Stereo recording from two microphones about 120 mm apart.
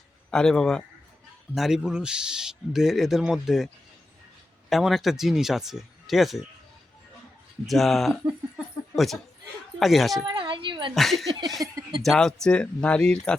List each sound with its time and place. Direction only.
0.3 s a man's voice: 5° left (ahead or behind)
4.7 s a man's voice: centre (ahead or behind)
7.7 s a man's voice: centre (ahead or behind)
10.2 s a sound: 45° right (ahead or behind)
10.9 s a man's voice: centre (ahead or behind)
11.6 s speech: 30° right (ahead or behind)
12.0 s speech: centre (ahead or behind)